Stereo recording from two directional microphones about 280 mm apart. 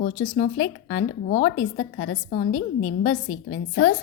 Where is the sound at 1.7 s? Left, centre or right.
Left.